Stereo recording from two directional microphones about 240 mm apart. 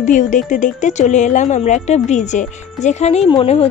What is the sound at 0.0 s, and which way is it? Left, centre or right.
Speech, left.